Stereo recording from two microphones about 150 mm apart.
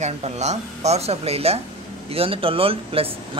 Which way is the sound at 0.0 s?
50° right (ahead or behind).